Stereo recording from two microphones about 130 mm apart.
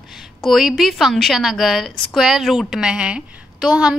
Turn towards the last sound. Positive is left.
turn(degrees=-5)  # may be behind; listen again after turning